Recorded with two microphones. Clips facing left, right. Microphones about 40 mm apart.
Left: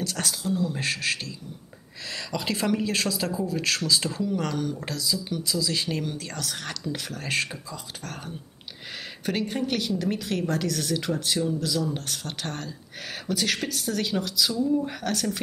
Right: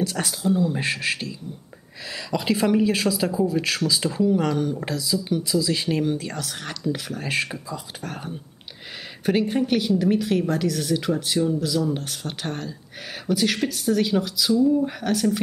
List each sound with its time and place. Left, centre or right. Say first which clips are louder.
0.0 s a woman's voice: right 5 dB; centre